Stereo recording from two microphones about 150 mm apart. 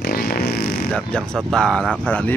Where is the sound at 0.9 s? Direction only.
5° left (ahead or behind).